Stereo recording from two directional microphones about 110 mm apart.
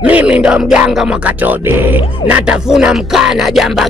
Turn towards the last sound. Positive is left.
turn(degrees=0)  # may be behind; listen again after turning